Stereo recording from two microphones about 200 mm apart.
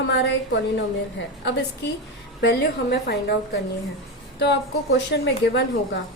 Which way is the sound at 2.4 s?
60° left (ahead or behind).